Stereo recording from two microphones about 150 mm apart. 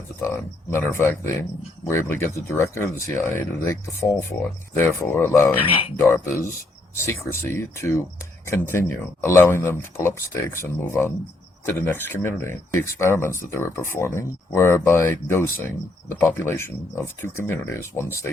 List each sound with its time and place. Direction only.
0.2 s speech: 15° left (ahead or behind)
5.5 s speech: 35° left (ahead or behind)
6.0 s speech: 15° left (ahead or behind)